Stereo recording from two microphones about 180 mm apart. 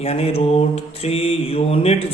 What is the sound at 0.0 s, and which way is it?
A man's voice, 35° left (ahead or behind).